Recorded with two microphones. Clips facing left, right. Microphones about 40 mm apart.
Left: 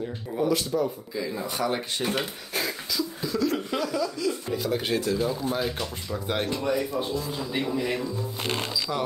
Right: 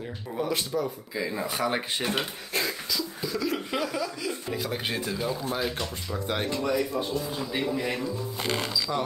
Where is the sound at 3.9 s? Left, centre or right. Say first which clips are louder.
Left 4 dB; right.